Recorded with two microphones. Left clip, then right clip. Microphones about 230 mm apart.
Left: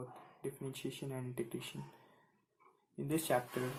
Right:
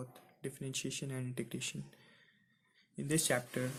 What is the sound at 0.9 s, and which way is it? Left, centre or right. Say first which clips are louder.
Speech: even; right.